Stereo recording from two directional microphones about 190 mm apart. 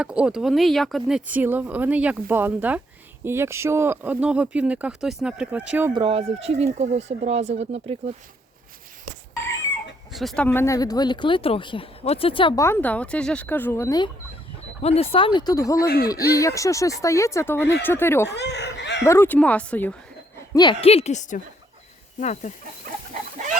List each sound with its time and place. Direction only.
0.0 s speech: 5° right (ahead or behind)
5.9 s speech: 25° right (ahead or behind)
10.1 s speech: centre (ahead or behind); by 12.6 s 25° left (ahead or behind)
12.6 s speech: 10° left (ahead or behind)
14.8 s speech: 30° left (ahead or behind); by 18.3 s 10° left (ahead or behind)
18.3 s chicken: 60° left (ahead or behind)
19.0 s speech: 15° left (ahead or behind)
20.5 s a woman's voice: 25° left (ahead or behind); by 22.5 s 40° left (ahead or behind)